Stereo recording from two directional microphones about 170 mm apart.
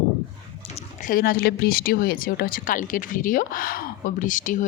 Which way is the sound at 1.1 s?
60° left (ahead or behind).